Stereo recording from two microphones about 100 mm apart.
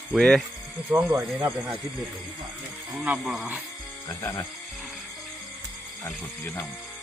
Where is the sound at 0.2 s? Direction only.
5° left (ahead or behind).